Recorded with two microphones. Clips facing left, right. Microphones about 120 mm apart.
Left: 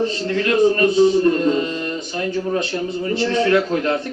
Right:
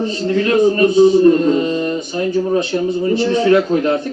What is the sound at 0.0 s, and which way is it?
Speech, 15° right (ahead or behind).